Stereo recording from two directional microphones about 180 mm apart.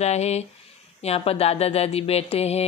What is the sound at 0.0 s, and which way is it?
Speech, 35° left (ahead or behind).